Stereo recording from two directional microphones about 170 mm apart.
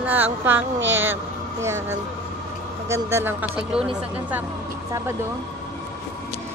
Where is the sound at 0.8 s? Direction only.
90° right.